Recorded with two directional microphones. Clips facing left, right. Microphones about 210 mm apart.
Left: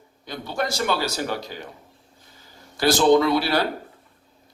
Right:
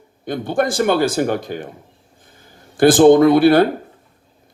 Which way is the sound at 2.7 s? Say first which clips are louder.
Right 8 dB; 50° right (ahead or behind).